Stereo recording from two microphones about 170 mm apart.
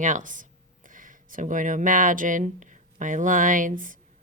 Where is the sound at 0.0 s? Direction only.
50° right (ahead or behind).